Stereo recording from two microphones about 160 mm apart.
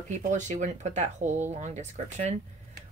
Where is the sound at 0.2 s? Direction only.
50° right (ahead or behind).